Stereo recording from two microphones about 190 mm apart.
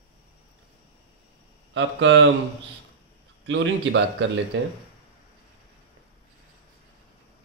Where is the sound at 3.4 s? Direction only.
75° right (ahead or behind).